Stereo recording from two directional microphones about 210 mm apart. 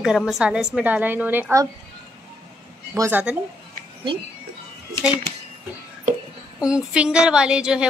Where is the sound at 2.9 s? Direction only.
10° right (ahead or behind).